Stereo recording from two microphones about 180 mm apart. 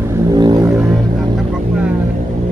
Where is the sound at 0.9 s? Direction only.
Centre (ahead or behind).